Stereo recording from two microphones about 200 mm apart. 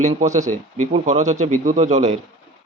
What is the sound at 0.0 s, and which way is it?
Speech, 35° right (ahead or behind).